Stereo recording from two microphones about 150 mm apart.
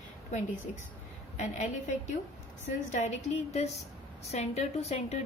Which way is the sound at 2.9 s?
50° left (ahead or behind).